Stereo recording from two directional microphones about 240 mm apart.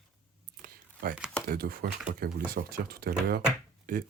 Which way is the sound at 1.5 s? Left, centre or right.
Right.